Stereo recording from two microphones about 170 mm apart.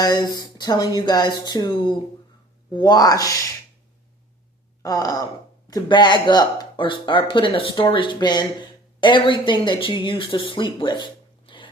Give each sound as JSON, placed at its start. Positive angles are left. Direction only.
{"t": 0.0, "sound": "speech", "side_deg": 25}
{"t": 4.8, "sound": "gasp", "side_deg": 20}
{"t": 5.6, "sound": "speech", "side_deg": 25}